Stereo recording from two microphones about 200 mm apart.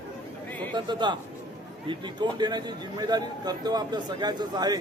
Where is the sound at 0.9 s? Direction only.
25° right (ahead or behind).